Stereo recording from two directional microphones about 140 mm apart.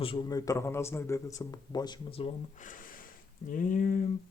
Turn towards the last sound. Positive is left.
turn(degrees=80)